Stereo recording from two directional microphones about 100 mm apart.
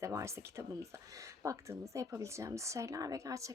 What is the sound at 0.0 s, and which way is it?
Speech, 30° right (ahead or behind).